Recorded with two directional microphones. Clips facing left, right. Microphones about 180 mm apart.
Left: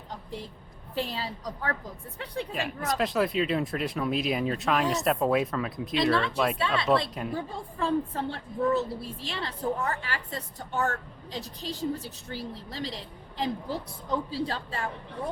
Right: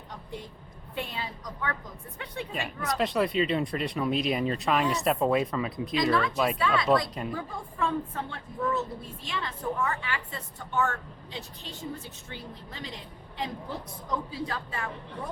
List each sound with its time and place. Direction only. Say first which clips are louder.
0.9 s a woman's voice: left 3 dB; 35° left (ahead or behind)
2.5 s speech: left 1 dB; centre (ahead or behind)
7.3 s a woman's voice: left 1 dB; 30° left (ahead or behind)